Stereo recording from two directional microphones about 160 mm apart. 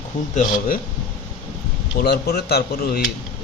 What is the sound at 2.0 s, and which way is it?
Speech, 90° left.